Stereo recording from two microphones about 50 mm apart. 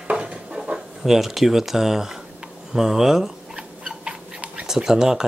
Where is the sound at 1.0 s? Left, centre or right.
Centre.